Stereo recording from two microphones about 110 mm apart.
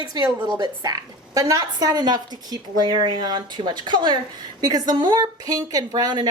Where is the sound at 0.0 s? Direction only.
40° right (ahead or behind).